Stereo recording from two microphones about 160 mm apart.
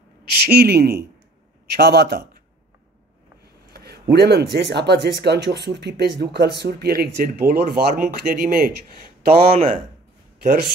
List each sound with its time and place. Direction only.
0.5 s speech: 80° right
1.7 s a man's voice: 90° right
3.7 s a sound: 85° right
4.1 s speech: 90° right; by 10.7 s 65° right (ahead or behind)